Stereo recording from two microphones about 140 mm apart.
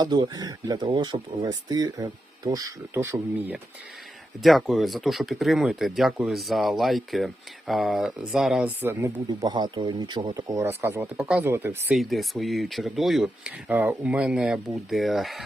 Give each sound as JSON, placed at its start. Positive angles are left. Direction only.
{"t": 0.0, "sound": "speech", "side_deg": -30}
{"t": 4.4, "sound": "speech", "side_deg": 0}
{"t": 9.5, "sound": "speech", "side_deg": -30}
{"t": 11.9, "sound": "speech", "side_deg": 0}